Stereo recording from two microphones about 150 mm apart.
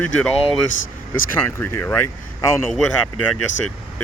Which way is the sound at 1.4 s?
15° left (ahead or behind).